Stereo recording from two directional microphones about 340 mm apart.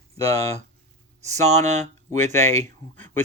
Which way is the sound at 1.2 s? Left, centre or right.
Centre.